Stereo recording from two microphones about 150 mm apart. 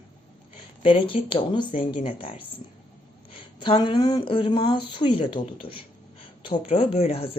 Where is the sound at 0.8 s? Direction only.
35° left (ahead or behind).